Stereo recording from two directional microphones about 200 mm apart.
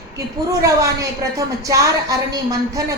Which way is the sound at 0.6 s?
15° right (ahead or behind).